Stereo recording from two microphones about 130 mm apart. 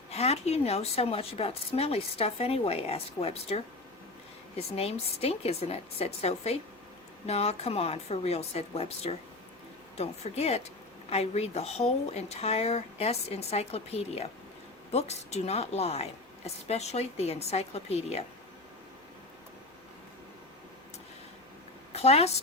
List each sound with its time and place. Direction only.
0.1 s speech: 55° left (ahead or behind)
21.9 s a woman's voice: 55° left (ahead or behind)